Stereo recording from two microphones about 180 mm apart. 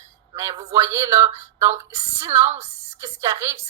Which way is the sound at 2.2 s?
15° right (ahead or behind).